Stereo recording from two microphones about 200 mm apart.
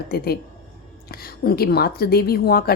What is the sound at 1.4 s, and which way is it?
A woman's voice, 50° left (ahead or behind).